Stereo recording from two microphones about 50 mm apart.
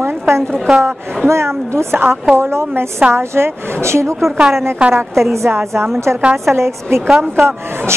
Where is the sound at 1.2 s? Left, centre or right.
Right.